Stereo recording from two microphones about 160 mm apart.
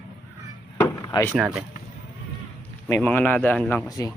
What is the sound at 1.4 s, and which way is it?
Speech, 5° right (ahead or behind).